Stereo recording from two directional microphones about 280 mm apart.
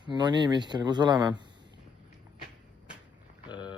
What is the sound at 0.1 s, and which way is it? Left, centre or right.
Speech, centre.